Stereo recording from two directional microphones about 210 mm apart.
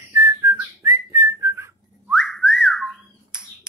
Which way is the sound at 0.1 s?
15° right (ahead or behind).